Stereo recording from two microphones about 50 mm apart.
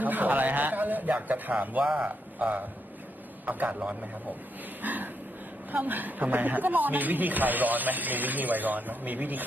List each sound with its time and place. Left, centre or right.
0.0 s a man's voice: right